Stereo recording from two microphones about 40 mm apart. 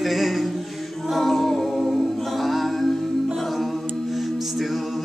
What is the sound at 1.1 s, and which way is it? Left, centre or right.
A capella, centre.